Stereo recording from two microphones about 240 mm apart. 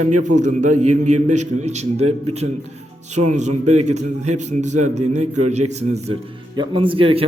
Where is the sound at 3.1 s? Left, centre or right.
Right.